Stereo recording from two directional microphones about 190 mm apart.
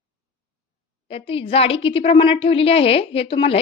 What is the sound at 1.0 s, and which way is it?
A woman's voice, 30° left (ahead or behind).